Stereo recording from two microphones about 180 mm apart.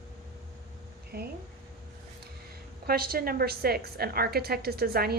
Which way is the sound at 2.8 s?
55° right (ahead or behind).